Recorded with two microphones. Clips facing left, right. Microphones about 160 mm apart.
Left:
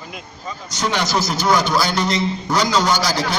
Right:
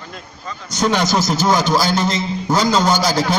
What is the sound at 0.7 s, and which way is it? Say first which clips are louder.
A man's voice: right 4 dB; 45° right (ahead or behind).